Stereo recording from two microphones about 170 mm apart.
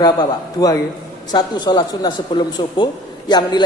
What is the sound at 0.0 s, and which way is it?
A man's voice, 20° left (ahead or behind).